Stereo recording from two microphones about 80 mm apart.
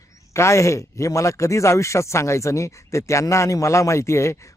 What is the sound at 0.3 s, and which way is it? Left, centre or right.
Speech, left.